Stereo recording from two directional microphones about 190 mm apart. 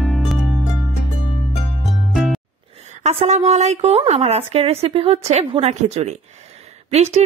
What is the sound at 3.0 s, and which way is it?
Speech, 35° right (ahead or behind).